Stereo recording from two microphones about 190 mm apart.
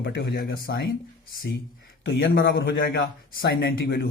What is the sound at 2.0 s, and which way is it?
A man's voice, 80° left.